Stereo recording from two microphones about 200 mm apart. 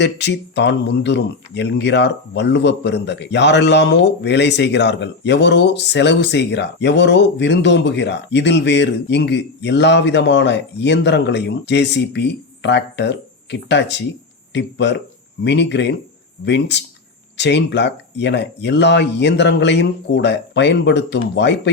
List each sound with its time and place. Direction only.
0.0 s speech: 60° left (ahead or behind)